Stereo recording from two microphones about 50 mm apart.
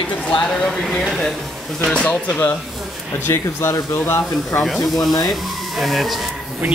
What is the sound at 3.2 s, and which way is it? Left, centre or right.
Speech, left.